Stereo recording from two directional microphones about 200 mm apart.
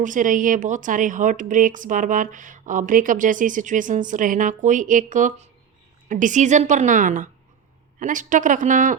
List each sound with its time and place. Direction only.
0.0 s speech: 40° right (ahead or behind)